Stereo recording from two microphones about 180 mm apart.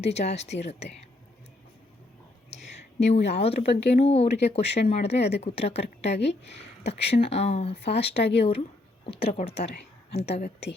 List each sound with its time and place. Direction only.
0.0 s speech: 35° left (ahead or behind)
2.5 s a sound: 35° left (ahead or behind)
3.9 s speech: 35° left (ahead or behind)
9.4 s speech: 35° left (ahead or behind)
10.4 s a woman's voice: 70° left (ahead or behind)